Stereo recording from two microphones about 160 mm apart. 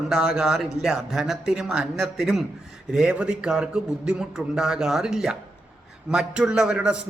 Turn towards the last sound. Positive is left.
turn(degrees=-5)  # may be behind; listen again after turning